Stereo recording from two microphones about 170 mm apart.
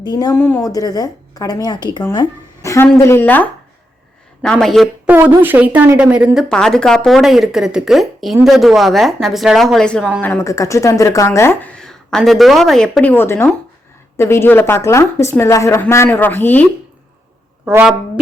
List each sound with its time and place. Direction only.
0.0 s speech: 25° left (ahead or behind)
0.3 s a woman's voice: 10° left (ahead or behind); by 2.2 s 25° left (ahead or behind)
2.6 s speech: 15° left (ahead or behind)
5.0 s speech: 10° right (ahead or behind)
6.5 s speech: 5° left (ahead or behind)